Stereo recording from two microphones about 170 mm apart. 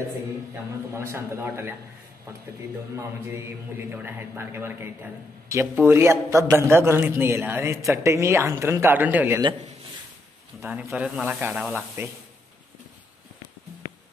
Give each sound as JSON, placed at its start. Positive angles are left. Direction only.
{"t": 0.9, "sound": "a man's voice", "side_deg": -15}
{"t": 3.0, "sound": "a man's voice", "side_deg": -15}
{"t": 10.6, "sound": "a man's voice", "side_deg": -10}